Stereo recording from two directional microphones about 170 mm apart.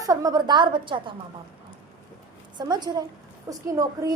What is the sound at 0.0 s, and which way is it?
A woman's voice, 20° right (ahead or behind).